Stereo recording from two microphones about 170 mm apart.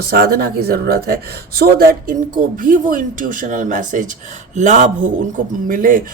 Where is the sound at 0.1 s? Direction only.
65° right (ahead or behind).